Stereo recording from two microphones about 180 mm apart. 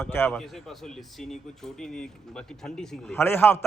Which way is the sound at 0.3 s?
Centre (ahead or behind).